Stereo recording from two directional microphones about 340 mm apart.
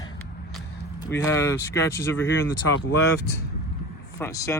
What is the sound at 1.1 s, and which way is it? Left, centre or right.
Speech, centre.